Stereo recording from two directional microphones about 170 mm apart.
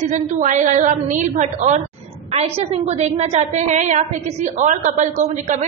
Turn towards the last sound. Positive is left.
turn(degrees=-45)  # may be behind; listen again after turning